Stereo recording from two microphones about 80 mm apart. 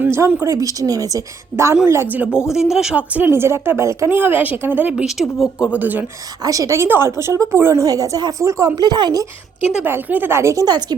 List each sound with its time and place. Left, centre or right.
0.0 s a sound: right
0.4 s a woman's voice: right
2.0 s speech: centre
3.2 s a woman's voice: right
4.2 s speech: right
5.0 s speech: centre
5.7 s speech: right
6.4 s a woman's voice: right
6.8 s a woman's voice: right
7.9 s a woman's voice: right
9.8 s speech: right
10.7 s speech: right